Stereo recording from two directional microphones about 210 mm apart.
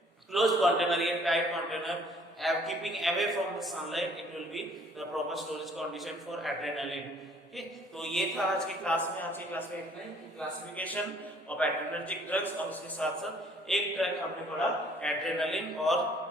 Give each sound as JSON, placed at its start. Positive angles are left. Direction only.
{"t": 0.3, "sound": "a man's voice", "side_deg": 0}
{"t": 10.8, "sound": "a man's voice", "side_deg": 5}